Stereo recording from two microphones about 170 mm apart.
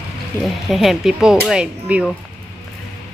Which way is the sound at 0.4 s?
Centre (ahead or behind).